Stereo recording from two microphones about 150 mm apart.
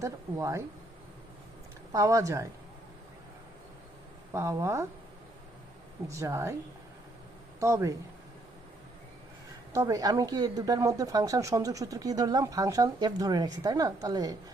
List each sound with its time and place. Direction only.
0.0 s speech: 20° right (ahead or behind)
1.9 s speech: 20° right (ahead or behind)
4.3 s speech: 20° right (ahead or behind)
6.1 s speech: 20° right (ahead or behind)
7.6 s speech: 20° right (ahead or behind)
9.7 s speech: 20° right (ahead or behind)